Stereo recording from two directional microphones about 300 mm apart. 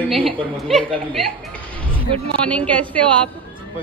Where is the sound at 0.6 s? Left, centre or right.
Centre.